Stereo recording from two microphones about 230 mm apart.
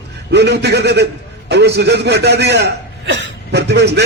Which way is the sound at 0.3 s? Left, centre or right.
Right.